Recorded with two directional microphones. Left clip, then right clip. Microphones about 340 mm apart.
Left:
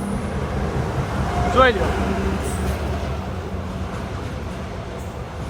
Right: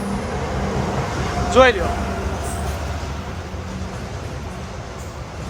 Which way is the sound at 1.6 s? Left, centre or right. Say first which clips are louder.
Right 3 dB; centre.